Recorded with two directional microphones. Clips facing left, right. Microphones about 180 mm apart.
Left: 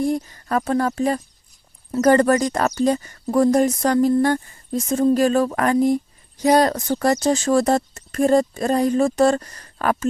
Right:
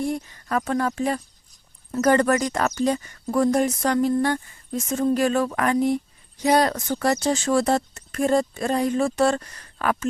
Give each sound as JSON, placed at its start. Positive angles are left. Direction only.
{"t": 0.0, "sound": "speech", "side_deg": 35}